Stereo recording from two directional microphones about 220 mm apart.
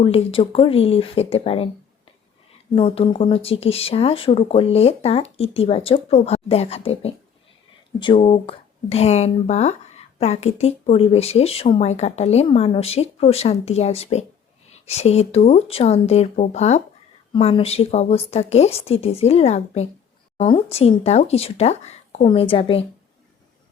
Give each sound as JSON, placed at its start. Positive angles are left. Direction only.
{"t": 0.0, "sound": "speech", "side_deg": 25}
{"t": 2.7, "sound": "speech", "side_deg": 25}